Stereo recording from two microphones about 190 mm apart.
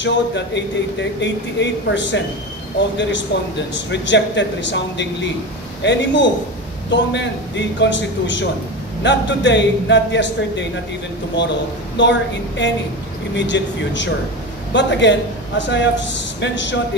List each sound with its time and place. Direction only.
0.0 s speech: 65° left (ahead or behind)
3.7 s speech: 70° left (ahead or behind)